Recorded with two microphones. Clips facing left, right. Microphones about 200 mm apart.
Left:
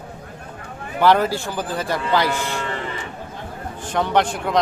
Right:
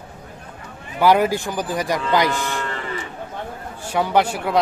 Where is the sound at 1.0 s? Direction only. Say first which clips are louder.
Right 1 dB; 10° right (ahead or behind).